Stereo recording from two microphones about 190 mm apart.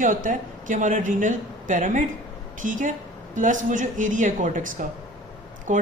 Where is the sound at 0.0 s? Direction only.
45° right (ahead or behind).